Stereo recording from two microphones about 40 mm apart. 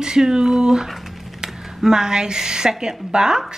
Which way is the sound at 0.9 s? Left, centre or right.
Centre.